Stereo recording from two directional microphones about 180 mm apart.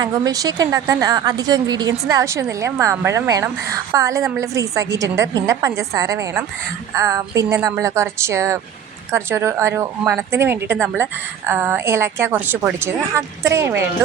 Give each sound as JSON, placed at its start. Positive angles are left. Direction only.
{"t": 0.0, "sound": "a woman's voice", "side_deg": -20}